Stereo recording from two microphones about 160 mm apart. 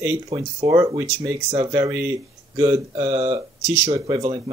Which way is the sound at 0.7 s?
20° right (ahead or behind).